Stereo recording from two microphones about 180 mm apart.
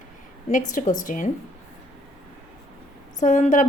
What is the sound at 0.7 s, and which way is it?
Speech, 45° left (ahead or behind).